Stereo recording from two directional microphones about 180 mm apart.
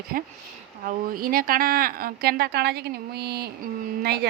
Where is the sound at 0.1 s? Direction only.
50° right (ahead or behind).